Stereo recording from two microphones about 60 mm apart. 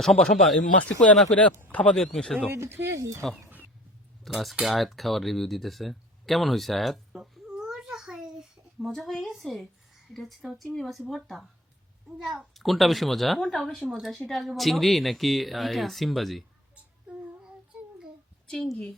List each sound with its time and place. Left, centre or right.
0.0 s speech: centre
1.0 s speech: centre
2.5 s speech: right
2.9 s speech: right
4.2 s speech: centre
4.6 s a sound: centre
8.9 s a woman's voice: centre
18.4 s a woman's voice: centre
18.7 s speech: centre